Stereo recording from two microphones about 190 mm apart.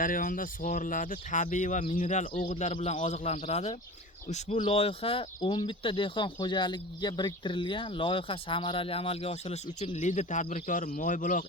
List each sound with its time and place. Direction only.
0.0 s a man's voice: 45° left (ahead or behind)